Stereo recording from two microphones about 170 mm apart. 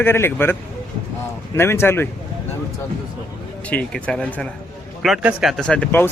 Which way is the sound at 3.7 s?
5° left (ahead or behind).